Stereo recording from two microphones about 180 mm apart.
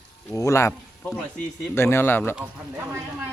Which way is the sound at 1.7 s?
15° left (ahead or behind).